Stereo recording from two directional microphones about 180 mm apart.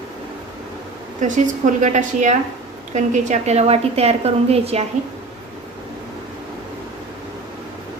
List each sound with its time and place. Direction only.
1.2 s a woman's voice: 45° right (ahead or behind)